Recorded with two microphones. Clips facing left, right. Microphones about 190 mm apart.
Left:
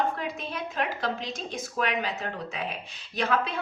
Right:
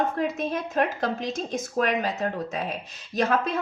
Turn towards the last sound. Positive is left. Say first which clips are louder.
# right 3 dB
turn(degrees=-45)  # may be behind; listen again after turning